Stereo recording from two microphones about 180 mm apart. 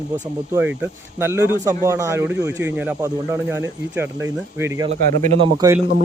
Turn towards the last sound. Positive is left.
turn(degrees=-15)  # may be behind; listen again after turning